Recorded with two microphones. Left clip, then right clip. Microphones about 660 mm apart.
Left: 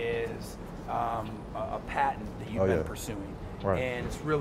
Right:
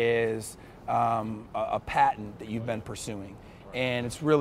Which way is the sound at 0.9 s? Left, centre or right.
Right.